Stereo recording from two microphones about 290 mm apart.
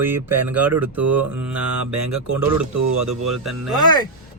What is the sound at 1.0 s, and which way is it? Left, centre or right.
Mantra, right.